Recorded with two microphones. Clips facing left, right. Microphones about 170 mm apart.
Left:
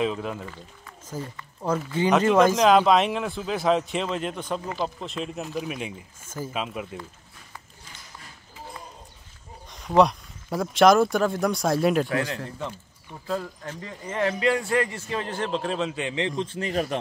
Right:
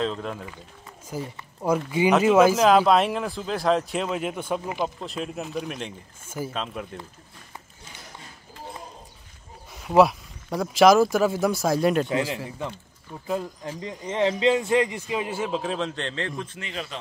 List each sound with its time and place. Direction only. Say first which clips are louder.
0.0 s speech: left 1 dB; 5° left (ahead or behind)
1.0 s a sound: right 2 dB; 10° right (ahead or behind)
1.9 s speech: right 1 dB; 10° right (ahead or behind); by 5.9 s 5° left (ahead or behind)
6.2 s speech: right 2 dB; 10° right (ahead or behind)
6.5 s speech: left 1 dB; 5° left (ahead or behind)
9.7 s speech: right 1 dB; 5° right (ahead or behind)
12.1 s a man's voice: right 1 dB; 25° right (ahead or behind)
12.4 s speech: right 1 dB; 10° right (ahead or behind); by 16.4 s 20° left (ahead or behind)
16.4 s speech: left 8 dB; 35° left (ahead or behind)